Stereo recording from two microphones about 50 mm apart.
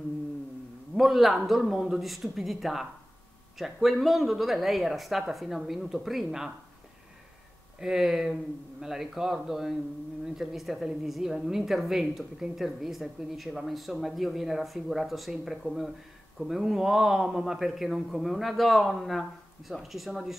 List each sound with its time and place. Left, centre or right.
0.9 s a woman's voice: centre
7.8 s a man's voice: centre